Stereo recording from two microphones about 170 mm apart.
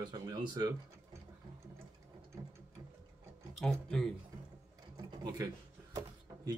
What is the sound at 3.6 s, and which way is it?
Speech, 5° left (ahead or behind).